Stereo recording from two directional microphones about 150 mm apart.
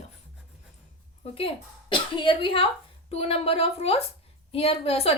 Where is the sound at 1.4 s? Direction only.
35° left (ahead or behind).